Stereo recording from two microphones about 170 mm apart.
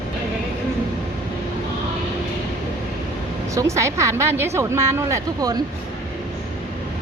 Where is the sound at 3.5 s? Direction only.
15° right (ahead or behind).